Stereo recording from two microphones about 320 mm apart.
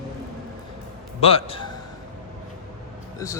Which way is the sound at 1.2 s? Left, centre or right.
Centre.